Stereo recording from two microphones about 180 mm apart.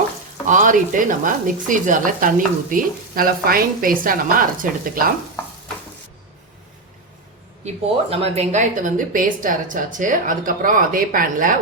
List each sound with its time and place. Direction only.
0.4 s speech: 45° right (ahead or behind)
8.1 s speech: 35° right (ahead or behind)